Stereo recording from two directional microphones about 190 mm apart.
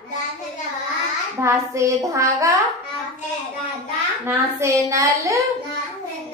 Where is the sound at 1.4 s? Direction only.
15° right (ahead or behind).